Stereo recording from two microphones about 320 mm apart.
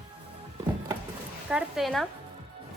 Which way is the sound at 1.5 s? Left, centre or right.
Centre.